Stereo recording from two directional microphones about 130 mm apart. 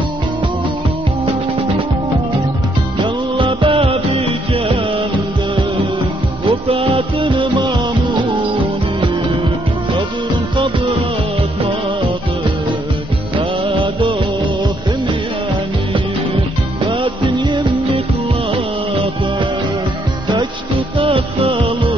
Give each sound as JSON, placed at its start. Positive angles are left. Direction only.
{"t": 3.0, "sound": "music", "side_deg": -40}
{"t": 6.7, "sound": "music", "side_deg": -45}
{"t": 13.4, "sound": "music", "side_deg": -40}
{"t": 16.8, "sound": "music", "side_deg": -40}
{"t": 21.0, "sound": "music", "side_deg": -40}